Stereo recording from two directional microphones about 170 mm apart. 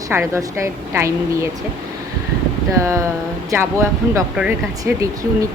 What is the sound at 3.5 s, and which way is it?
Speech, 15° right (ahead or behind).